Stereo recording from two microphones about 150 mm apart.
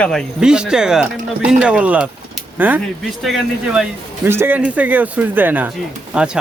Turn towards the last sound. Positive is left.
turn(degrees=-5)  # may be behind; listen again after turning